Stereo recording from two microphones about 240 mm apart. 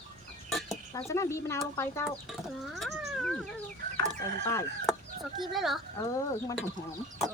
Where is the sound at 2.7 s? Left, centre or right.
Centre.